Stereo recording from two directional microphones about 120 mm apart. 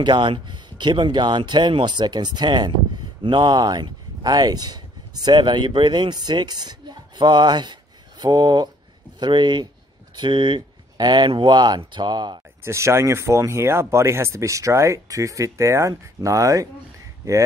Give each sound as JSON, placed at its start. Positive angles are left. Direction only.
{"t": 0.0, "sound": "speech", "side_deg": -40}
{"t": 12.6, "sound": "speech", "side_deg": -25}